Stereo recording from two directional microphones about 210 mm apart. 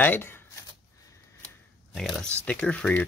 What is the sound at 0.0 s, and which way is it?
Speech, 10° left (ahead or behind).